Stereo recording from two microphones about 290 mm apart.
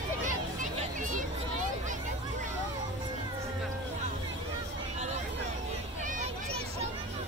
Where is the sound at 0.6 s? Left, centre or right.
Right.